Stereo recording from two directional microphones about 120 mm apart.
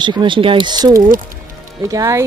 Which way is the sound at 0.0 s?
40° right (ahead or behind).